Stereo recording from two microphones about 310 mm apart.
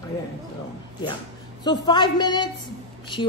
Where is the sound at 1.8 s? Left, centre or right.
Centre.